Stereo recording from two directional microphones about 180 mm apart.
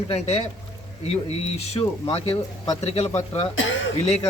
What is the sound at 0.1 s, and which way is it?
Speech, 35° left (ahead or behind).